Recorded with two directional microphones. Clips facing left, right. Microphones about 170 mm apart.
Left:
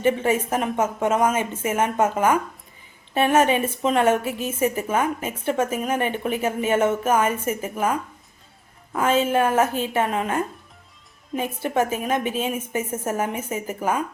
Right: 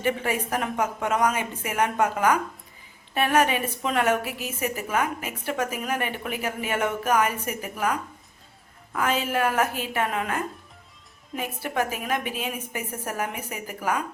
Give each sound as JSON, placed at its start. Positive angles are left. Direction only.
{"t": 0.0, "sound": "a woman's voice", "side_deg": 25}